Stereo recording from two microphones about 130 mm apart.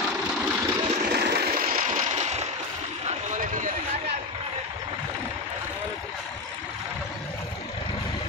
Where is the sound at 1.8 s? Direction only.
70° right (ahead or behind).